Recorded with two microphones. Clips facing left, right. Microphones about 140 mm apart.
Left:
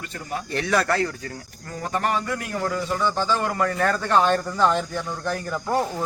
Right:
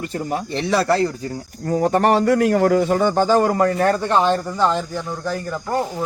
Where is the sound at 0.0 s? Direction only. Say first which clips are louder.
Right 7 dB; 35° right (ahead or behind).